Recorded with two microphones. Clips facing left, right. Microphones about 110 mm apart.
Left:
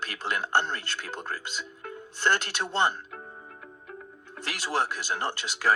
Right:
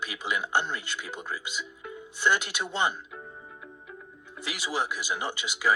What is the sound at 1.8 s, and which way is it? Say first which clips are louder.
Music: left 1 dB; 50° left (ahead or behind).